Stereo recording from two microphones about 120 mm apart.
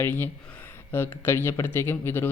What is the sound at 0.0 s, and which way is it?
Speech, 15° left (ahead or behind).